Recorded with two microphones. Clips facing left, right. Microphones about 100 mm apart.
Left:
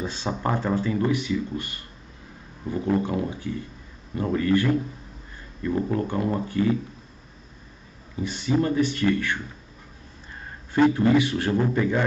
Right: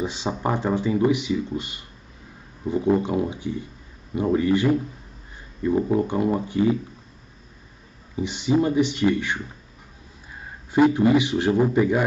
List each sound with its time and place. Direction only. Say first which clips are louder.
0.0 s speech: right 2 dB; 15° right (ahead or behind)
8.2 s speech: right 3 dB; 20° right (ahead or behind)
10.7 s speech: right 2 dB; 15° right (ahead or behind)